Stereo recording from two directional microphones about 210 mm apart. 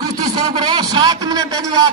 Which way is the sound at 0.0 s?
20° right (ahead or behind).